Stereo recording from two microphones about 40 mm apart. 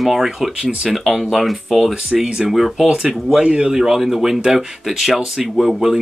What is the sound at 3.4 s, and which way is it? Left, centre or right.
Speech, right.